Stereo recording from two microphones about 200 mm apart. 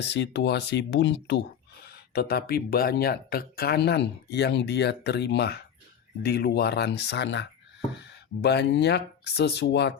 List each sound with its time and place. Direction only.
0.0 s speech: 60° left (ahead or behind)